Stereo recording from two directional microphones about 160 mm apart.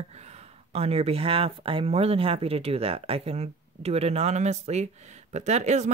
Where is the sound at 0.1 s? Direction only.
40° right (ahead or behind).